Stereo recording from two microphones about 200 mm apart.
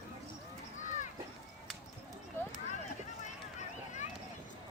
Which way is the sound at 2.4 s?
10° left (ahead or behind).